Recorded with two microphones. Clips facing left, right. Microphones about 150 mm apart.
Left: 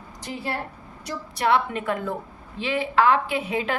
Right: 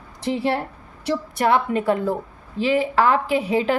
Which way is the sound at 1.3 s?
45° right (ahead or behind).